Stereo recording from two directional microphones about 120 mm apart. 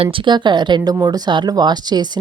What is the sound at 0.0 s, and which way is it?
Speech, 45° right (ahead or behind).